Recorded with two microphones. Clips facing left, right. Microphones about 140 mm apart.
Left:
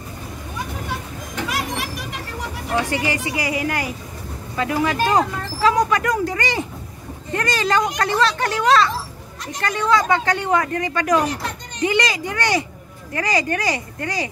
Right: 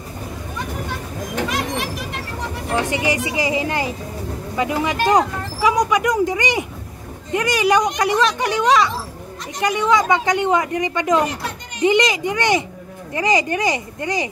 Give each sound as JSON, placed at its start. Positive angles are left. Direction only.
{"t": 1.5, "sound": "children playing", "side_deg": 0}
{"t": 2.9, "sound": "speech", "side_deg": -20}